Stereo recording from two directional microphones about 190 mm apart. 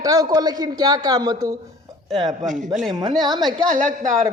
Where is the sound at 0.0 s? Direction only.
20° right (ahead or behind).